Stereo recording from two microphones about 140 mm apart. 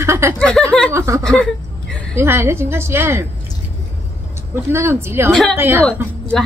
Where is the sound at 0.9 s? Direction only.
20° right (ahead or behind).